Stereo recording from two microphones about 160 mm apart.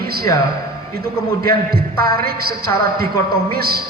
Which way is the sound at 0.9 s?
70° right (ahead or behind).